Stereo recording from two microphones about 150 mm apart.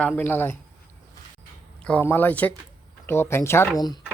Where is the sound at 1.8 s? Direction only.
10° left (ahead or behind).